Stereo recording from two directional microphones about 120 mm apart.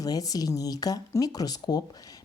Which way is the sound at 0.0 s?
30° left (ahead or behind).